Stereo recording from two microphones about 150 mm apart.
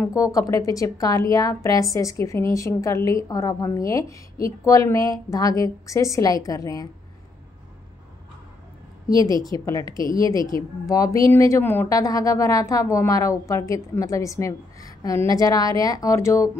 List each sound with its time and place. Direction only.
0.0 s a woman's voice: 20° left (ahead or behind)
9.0 s a woman's voice: 25° left (ahead or behind)